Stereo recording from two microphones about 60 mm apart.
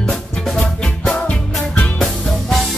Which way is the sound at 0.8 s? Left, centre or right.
Centre.